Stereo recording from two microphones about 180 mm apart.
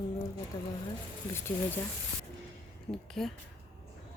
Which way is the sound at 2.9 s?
15° left (ahead or behind).